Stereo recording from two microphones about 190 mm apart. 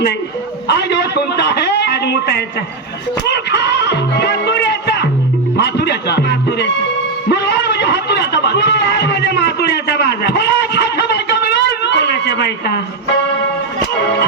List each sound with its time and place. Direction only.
0.7 s a man's voice: 60° left (ahead or behind)
5.5 s music: 60° left (ahead or behind)
7.3 s a sound: 60° left (ahead or behind)